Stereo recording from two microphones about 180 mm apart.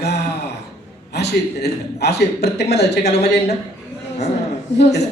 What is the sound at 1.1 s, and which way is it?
A man's voice, 65° left (ahead or behind).